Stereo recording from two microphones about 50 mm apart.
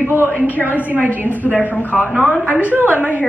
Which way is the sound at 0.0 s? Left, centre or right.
Right.